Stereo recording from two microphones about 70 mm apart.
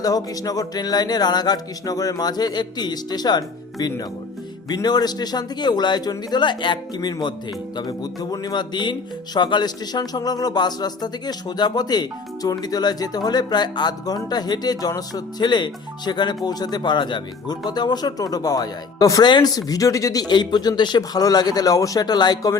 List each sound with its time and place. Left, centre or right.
0.0 s speech: left
19.2 s speech: left
20.2 s speech: left